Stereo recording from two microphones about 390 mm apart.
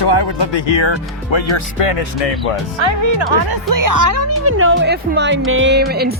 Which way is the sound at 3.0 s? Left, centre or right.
Right.